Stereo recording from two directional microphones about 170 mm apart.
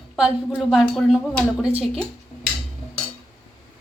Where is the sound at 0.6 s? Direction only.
Centre (ahead or behind).